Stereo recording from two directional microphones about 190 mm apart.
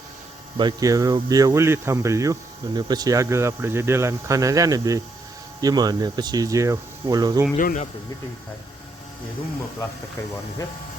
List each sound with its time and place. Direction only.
0.5 s speech: 20° right (ahead or behind)
7.5 s speech: 40° left (ahead or behind)